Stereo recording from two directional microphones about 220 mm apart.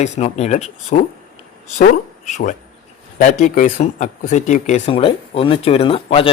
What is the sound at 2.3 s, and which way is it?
Speech, 35° left (ahead or behind).